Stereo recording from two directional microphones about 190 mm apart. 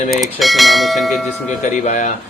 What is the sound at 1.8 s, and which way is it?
Speech, 40° left (ahead or behind).